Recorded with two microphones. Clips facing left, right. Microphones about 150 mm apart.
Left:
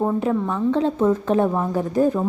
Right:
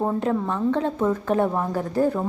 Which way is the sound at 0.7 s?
15° left (ahead or behind).